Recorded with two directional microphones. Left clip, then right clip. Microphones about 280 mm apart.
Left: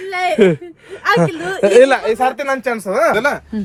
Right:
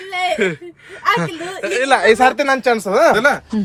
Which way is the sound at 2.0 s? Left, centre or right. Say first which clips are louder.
Right 4 dB; right.